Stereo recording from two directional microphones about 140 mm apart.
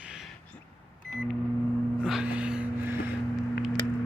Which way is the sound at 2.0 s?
5° right (ahead or behind).